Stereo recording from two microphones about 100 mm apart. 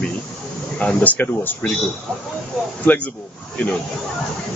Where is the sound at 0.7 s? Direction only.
15° left (ahead or behind).